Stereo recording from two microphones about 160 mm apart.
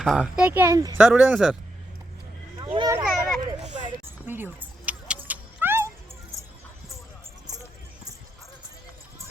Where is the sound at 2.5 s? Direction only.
30° right (ahead or behind).